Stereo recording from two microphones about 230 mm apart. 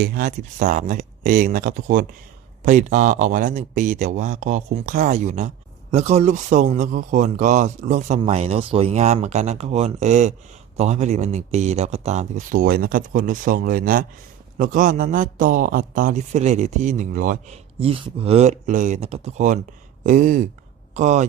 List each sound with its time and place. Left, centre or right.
0.0 s a man's voice: right